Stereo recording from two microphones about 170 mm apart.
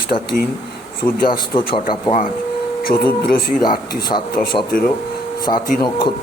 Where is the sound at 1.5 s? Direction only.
30° left (ahead or behind).